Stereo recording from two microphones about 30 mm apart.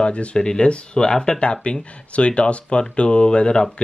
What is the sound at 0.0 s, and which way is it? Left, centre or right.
Speech, left.